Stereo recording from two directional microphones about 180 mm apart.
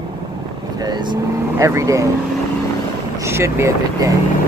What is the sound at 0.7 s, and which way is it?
Speech, 25° right (ahead or behind).